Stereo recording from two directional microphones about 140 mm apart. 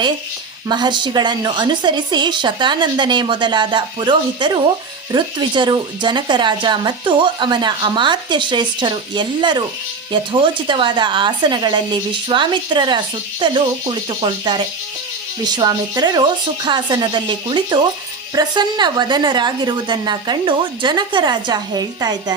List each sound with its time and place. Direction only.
0.7 s speech: 30° right (ahead or behind)